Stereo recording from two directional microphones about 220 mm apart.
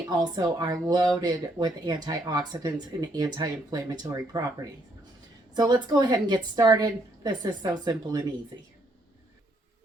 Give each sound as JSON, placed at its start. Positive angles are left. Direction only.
{"t": 0.1, "sound": "speech", "side_deg": -20}